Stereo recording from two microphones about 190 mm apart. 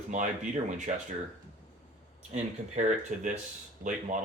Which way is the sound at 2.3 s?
40° right (ahead or behind).